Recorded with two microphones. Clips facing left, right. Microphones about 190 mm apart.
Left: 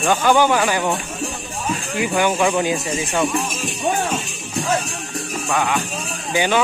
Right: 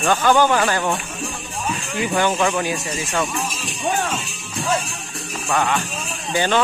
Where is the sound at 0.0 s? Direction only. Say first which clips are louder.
Even; 10° left (ahead or behind).